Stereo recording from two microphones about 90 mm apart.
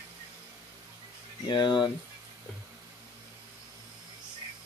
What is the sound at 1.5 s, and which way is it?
Speech, 60° left (ahead or behind).